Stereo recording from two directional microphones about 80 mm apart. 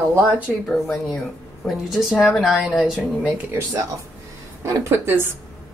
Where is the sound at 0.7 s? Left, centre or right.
Centre.